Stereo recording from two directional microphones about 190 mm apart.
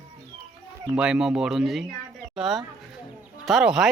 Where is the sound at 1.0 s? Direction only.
5° right (ahead or behind).